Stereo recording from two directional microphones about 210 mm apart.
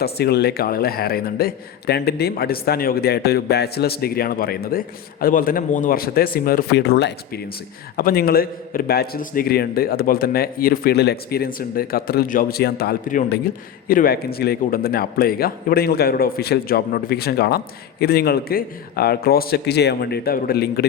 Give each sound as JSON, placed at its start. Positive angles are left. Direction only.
{"t": 0.0, "sound": "a man's voice", "side_deg": 50}